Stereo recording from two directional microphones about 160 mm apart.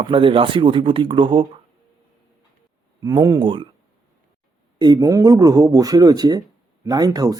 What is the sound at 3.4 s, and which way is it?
Speech, 30° right (ahead or behind).